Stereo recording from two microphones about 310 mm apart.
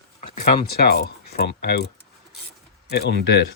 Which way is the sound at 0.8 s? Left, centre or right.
Left.